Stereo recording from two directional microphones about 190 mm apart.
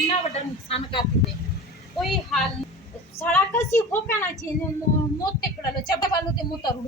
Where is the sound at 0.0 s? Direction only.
35° left (ahead or behind).